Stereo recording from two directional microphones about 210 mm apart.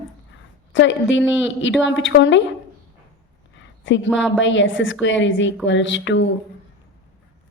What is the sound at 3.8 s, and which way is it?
A woman's voice, 60° left (ahead or behind).